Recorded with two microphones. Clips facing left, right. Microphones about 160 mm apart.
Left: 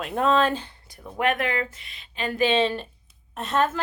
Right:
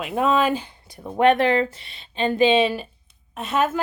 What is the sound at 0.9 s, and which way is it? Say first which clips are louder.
Speech: right 8 dB; 30° right (ahead or behind).